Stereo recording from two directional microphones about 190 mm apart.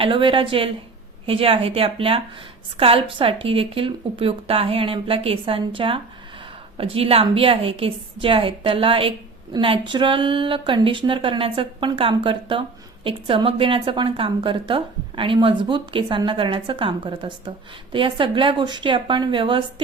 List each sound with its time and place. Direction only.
0.0 s a woman's voice: 25° right (ahead or behind)